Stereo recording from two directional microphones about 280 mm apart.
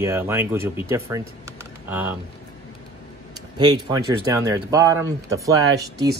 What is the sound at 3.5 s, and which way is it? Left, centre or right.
Speech, centre.